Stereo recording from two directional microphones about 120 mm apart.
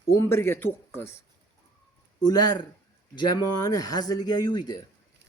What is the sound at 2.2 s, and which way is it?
Speech, 35° left (ahead or behind).